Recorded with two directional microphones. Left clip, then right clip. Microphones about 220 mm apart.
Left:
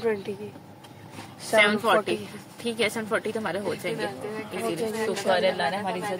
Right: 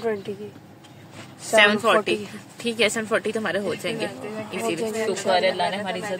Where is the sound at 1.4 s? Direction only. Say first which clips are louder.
Right 3 dB; 20° right (ahead or behind).